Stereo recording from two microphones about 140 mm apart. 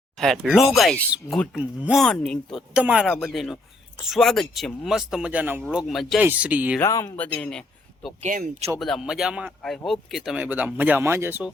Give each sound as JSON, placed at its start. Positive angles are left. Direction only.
{"t": 0.2, "sound": "a man's voice", "side_deg": 0}
{"t": 2.0, "sound": "a man's voice", "side_deg": 5}
{"t": 5.7, "sound": "a man's voice", "side_deg": 0}
{"t": 6.2, "sound": "speech", "side_deg": -10}
{"t": 6.7, "sound": "speech", "side_deg": 20}
{"t": 8.2, "sound": "speech", "side_deg": -65}
{"t": 8.8, "sound": "a man's voice", "side_deg": 0}